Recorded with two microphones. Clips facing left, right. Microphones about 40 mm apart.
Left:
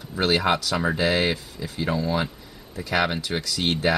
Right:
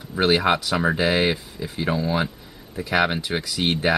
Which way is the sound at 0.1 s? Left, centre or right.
Centre.